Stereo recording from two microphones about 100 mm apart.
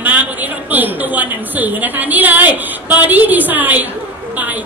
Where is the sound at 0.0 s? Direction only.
15° right (ahead or behind).